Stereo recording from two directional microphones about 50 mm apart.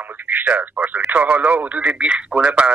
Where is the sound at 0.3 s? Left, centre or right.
Right.